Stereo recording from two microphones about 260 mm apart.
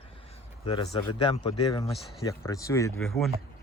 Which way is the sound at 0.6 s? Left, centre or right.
Centre.